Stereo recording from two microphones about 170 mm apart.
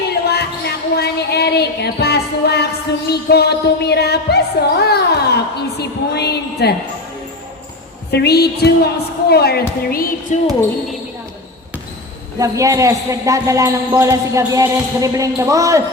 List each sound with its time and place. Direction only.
0.1 s a sound: 70° left (ahead or behind)
3.1 s music: 75° left (ahead or behind)
8.1 s music: 75° left (ahead or behind)
9.3 s a woman's voice: 70° left (ahead or behind)
12.4 s speech: 20° right (ahead or behind)